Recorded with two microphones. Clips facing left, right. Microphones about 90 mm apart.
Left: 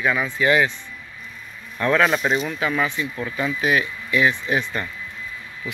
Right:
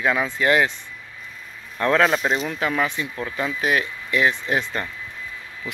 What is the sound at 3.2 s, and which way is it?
Speech, 35° right (ahead or behind).